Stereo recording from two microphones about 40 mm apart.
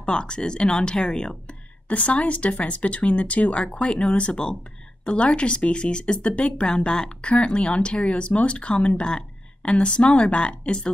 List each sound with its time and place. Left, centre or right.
0.0 s speech: left
1.9 s speech: left